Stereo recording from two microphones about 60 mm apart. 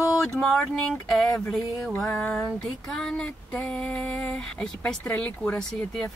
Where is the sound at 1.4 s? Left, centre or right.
Centre.